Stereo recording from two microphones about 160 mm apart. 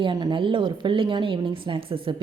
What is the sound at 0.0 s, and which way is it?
A woman's voice, 30° right (ahead or behind).